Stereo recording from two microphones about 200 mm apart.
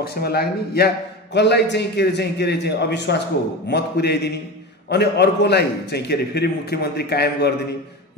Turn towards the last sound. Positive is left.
turn(degrees=55)  # may be behind; listen again after turning